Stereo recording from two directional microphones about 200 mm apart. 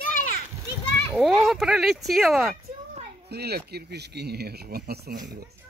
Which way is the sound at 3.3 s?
55° right (ahead or behind).